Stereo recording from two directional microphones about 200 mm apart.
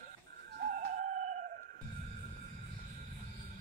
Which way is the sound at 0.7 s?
45° right (ahead or behind).